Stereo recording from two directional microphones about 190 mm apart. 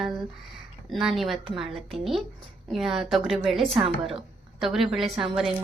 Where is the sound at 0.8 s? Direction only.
Centre (ahead or behind).